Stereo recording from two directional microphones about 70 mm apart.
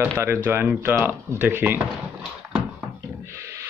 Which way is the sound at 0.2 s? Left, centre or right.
Right.